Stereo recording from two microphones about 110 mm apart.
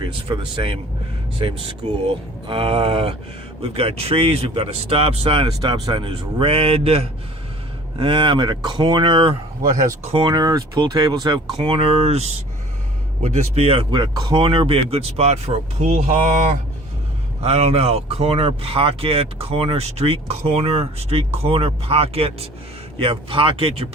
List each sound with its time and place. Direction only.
0.0 s speech: 50° right (ahead or behind)
5.5 s speech: 35° right (ahead or behind)
6.0 s speech: 55° right (ahead or behind)
7.9 s speech: 50° right (ahead or behind)
11.5 s speech: 50° right (ahead or behind)
13.9 s speech: 40° right (ahead or behind); by 16.1 s 80° right
17.4 s speech: 70° right (ahead or behind)